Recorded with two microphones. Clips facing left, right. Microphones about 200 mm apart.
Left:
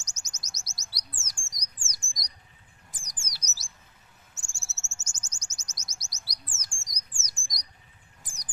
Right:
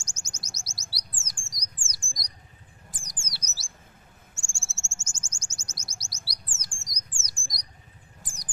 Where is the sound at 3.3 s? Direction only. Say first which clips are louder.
Right 2 dB; 30° right (ahead or behind).